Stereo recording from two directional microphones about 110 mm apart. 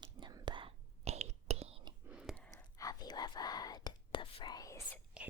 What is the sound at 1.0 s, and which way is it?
Whispering, 75° right (ahead or behind).